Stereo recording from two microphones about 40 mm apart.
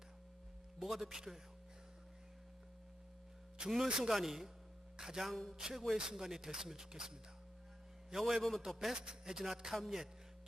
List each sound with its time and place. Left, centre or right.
0.8 s speech: centre
3.8 s speech: right
4.1 s speech: centre
5.3 s a man's voice: centre
5.5 s a man's voice: centre
9.0 s speech: centre